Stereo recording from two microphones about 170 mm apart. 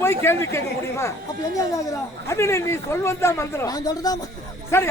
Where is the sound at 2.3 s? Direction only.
15° left (ahead or behind).